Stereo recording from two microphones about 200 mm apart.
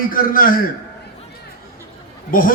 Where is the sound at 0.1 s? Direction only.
45° left (ahead or behind).